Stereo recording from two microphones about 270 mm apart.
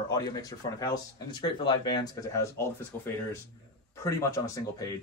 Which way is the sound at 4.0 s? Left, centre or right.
Centre.